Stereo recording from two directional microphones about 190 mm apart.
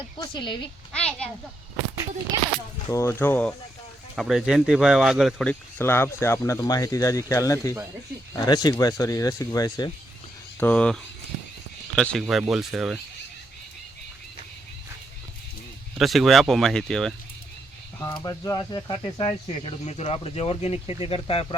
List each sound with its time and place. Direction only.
0.2 s speech: 25° left (ahead or behind)
0.9 s speech: 5° left (ahead or behind)
2.9 s speech: 15° left (ahead or behind)
4.1 s speech: centre (ahead or behind); by 9.9 s 20° left (ahead or behind)
10.6 s speech: 5° left (ahead or behind)
16.0 s speech: centre (ahead or behind)
18.0 s speech: 20° left (ahead or behind)